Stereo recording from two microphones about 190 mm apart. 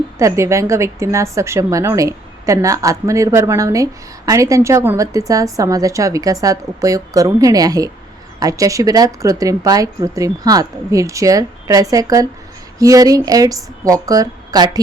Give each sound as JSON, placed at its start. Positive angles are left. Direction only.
{"t": 0.2, "sound": "a woman's voice", "side_deg": -15}